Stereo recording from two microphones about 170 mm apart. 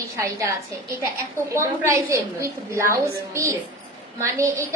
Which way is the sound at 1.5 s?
15° right (ahead or behind).